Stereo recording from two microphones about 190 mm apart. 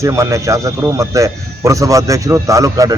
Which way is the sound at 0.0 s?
15° right (ahead or behind).